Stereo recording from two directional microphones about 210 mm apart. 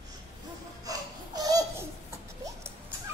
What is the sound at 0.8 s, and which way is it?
Laughter, 15° right (ahead or behind).